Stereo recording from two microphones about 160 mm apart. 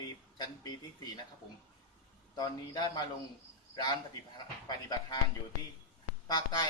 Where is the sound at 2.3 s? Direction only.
25° left (ahead or behind).